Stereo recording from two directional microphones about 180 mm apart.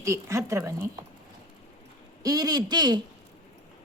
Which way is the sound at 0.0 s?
15° right (ahead or behind).